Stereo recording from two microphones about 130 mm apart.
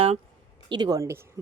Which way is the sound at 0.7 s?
30° right (ahead or behind).